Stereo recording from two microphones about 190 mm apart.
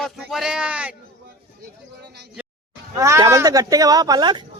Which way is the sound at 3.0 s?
15° right (ahead or behind).